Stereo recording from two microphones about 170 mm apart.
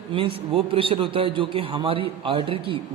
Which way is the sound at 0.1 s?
35° right (ahead or behind).